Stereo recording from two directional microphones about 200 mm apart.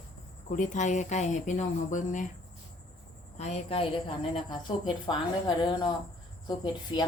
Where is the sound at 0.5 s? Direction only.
40° left (ahead or behind).